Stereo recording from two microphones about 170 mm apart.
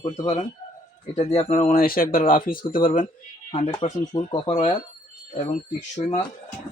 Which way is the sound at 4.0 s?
25° left (ahead or behind).